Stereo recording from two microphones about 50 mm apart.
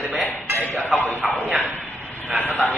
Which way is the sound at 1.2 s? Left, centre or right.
Centre.